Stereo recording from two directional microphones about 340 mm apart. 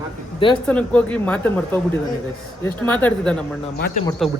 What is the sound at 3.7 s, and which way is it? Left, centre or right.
Speech, left.